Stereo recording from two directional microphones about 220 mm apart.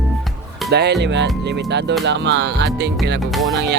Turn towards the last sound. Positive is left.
turn(degrees=0)  # may be behind; listen again after turning